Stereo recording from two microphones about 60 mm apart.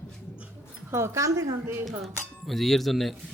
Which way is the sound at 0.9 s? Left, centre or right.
Right.